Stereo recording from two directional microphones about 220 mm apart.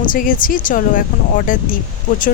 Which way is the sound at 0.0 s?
40° left (ahead or behind).